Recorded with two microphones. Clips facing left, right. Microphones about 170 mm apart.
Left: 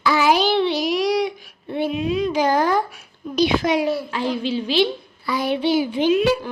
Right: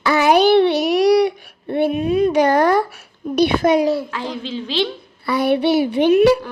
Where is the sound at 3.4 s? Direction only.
50° right (ahead or behind).